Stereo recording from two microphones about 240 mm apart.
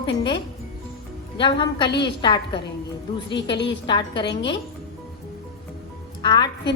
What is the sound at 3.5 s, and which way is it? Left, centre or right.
Speech, left.